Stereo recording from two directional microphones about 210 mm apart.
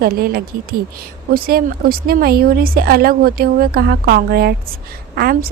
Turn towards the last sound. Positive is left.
turn(degrees=-45)  # may be behind; listen again after turning